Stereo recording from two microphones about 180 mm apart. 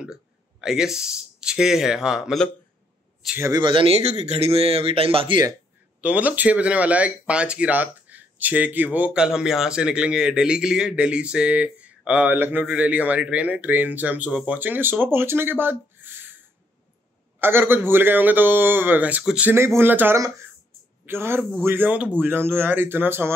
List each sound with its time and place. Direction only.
0.0 s speech: 5° right (ahead or behind)
3.2 s a sound: 5° right (ahead or behind)
3.4 s speech: 25° right (ahead or behind)
6.0 s speech: 10° right (ahead or behind)
17.4 s speech: 10° right (ahead or behind)